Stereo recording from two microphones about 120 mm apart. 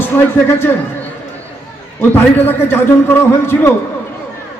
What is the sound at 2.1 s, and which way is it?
A man's voice, 15° left (ahead or behind).